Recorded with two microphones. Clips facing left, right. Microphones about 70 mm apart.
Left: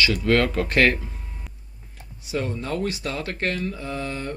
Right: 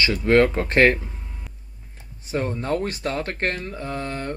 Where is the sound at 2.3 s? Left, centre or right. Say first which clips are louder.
Right 3 dB; right.